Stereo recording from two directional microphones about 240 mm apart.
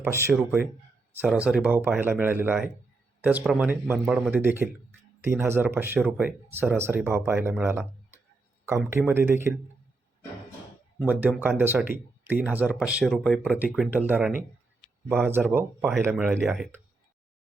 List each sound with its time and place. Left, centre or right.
0.0 s speech: centre
11.0 s speech: centre